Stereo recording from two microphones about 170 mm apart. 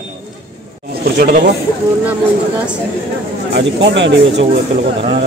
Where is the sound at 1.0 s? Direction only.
60° right (ahead or behind).